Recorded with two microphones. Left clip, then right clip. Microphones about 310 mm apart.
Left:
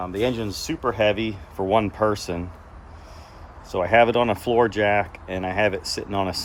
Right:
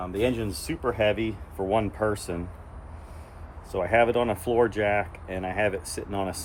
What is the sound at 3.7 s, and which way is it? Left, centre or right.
Speech, left.